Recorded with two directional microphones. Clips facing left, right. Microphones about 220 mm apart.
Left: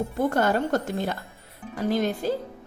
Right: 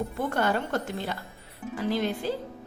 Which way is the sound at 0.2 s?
40° left (ahead or behind).